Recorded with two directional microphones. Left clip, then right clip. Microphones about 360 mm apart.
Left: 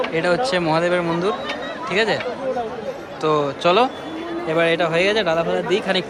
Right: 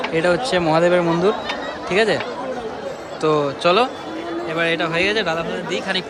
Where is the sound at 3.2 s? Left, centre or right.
Centre.